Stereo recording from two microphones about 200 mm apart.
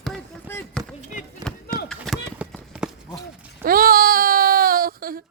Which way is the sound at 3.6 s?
45° right (ahead or behind).